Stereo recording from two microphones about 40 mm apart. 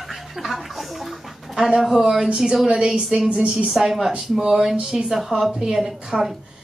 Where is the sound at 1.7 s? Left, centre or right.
Centre.